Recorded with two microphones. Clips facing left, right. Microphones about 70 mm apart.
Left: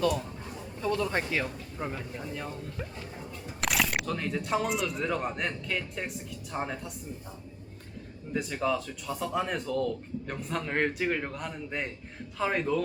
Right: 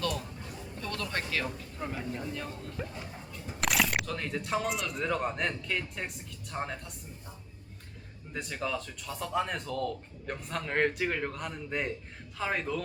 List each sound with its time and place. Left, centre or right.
0.8 s speech: centre
3.6 s speech: centre
8.3 s speech: centre